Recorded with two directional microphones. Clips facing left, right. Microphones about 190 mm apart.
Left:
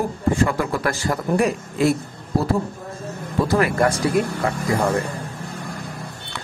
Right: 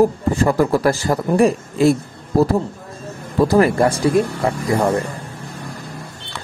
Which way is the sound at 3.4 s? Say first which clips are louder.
Right 6 dB; 35° right (ahead or behind).